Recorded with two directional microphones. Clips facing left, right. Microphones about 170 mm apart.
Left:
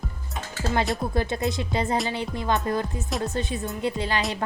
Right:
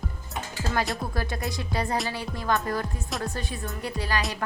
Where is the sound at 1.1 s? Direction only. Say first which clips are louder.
Left 5 dB; 25° left (ahead or behind).